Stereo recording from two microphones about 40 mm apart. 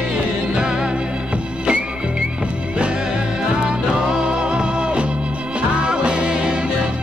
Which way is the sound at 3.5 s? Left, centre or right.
Centre.